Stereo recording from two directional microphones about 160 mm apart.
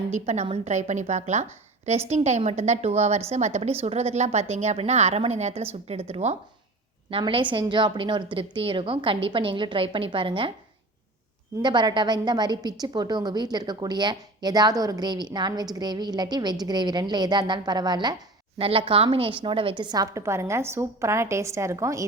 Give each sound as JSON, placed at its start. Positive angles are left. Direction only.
{"t": 0.1, "sound": "a woman's voice", "side_deg": -45}
{"t": 11.6, "sound": "a woman's voice", "side_deg": -25}